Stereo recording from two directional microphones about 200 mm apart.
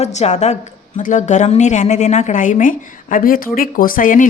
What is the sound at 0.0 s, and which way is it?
A woman's voice, 35° left (ahead or behind).